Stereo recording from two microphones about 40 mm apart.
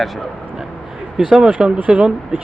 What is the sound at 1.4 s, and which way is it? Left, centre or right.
Speech, right.